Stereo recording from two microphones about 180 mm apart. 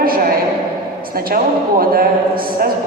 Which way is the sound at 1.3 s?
55° right (ahead or behind).